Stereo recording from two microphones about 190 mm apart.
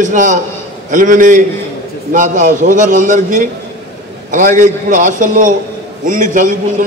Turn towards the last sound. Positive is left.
turn(degrees=-45)  # may be behind; listen again after turning